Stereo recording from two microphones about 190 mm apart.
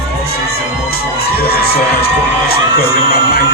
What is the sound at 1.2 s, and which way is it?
Music, 55° left (ahead or behind).